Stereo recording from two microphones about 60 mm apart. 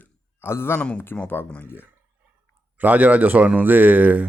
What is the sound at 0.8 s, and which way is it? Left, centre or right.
Speech, centre.